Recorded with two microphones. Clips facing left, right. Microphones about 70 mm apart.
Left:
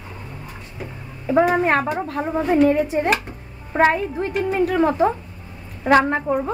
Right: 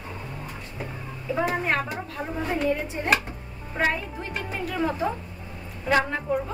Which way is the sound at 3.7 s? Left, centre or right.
Left.